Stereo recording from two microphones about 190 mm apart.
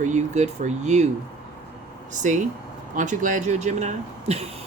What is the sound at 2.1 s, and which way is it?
Speech, 40° right (ahead or behind).